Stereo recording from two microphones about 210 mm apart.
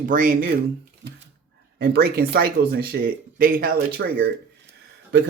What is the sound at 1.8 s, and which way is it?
Speech, 45° right (ahead or behind).